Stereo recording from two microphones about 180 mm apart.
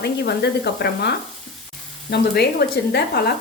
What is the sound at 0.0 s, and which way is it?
Speech, 65° left (ahead or behind).